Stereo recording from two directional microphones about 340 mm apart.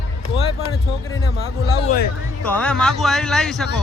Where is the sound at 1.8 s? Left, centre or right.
Left.